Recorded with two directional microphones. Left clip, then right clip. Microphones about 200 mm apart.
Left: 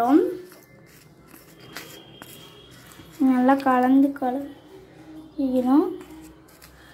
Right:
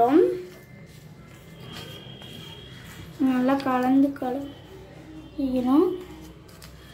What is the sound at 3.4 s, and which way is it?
Speech, 15° left (ahead or behind).